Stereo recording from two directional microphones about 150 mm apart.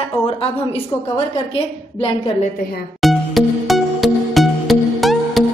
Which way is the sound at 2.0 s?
40° left (ahead or behind).